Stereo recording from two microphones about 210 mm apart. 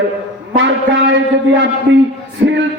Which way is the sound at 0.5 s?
60° right (ahead or behind).